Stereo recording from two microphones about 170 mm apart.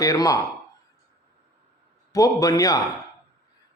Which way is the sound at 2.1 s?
20° left (ahead or behind).